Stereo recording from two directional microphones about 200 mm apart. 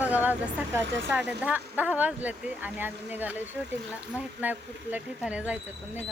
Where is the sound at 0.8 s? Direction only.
65° right (ahead or behind).